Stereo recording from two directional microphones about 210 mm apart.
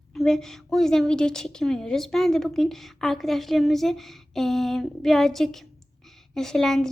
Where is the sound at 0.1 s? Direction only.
Centre (ahead or behind).